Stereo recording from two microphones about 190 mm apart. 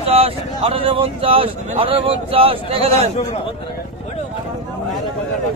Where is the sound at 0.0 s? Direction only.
30° right (ahead or behind).